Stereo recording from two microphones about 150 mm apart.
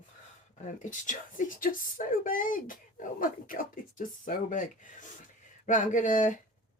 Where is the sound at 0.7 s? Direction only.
55° left (ahead or behind).